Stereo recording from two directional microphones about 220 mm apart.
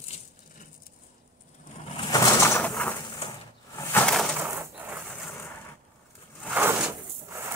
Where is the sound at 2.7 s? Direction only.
5° left (ahead or behind).